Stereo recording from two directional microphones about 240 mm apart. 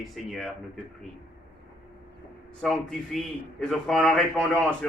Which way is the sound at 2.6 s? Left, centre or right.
Centre.